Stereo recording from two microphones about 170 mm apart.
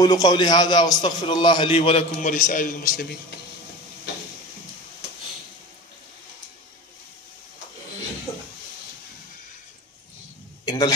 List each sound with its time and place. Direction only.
0.0 s a man's voice: 25° left (ahead or behind)
2.2 s a man's voice: 45° left (ahead or behind)
10.6 s a sound: 25° left (ahead or behind)